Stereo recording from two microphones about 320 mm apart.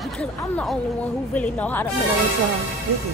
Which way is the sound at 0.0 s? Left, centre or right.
Centre.